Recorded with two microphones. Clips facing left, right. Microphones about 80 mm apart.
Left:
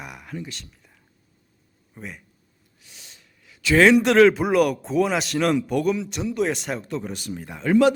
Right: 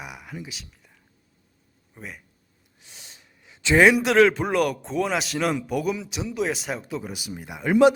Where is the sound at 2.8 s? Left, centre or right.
Right.